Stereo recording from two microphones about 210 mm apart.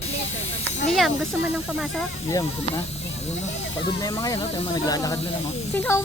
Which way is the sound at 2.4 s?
30° left (ahead or behind).